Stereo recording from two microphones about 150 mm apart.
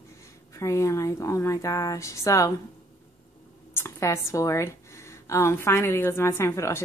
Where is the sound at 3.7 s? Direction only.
15° left (ahead or behind).